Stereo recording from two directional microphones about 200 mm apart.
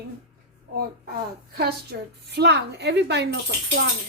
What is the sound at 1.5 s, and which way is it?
A woman's voice, 55° right (ahead or behind).